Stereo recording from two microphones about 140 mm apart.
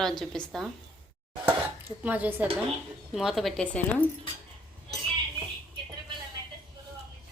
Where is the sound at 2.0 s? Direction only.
10° right (ahead or behind).